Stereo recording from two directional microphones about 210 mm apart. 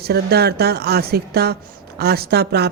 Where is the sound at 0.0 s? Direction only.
50° right (ahead or behind).